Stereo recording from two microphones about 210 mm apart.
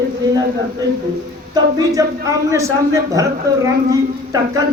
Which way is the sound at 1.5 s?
15° right (ahead or behind).